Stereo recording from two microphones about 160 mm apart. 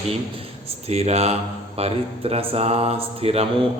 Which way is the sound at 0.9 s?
40° right (ahead or behind).